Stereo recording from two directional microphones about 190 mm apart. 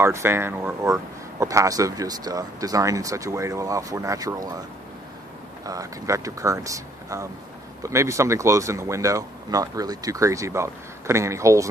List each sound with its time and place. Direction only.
0.0 s speech: 15° right (ahead or behind)
5.7 s speech: 15° right (ahead or behind)